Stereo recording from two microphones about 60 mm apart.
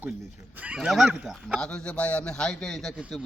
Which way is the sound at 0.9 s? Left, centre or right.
Centre.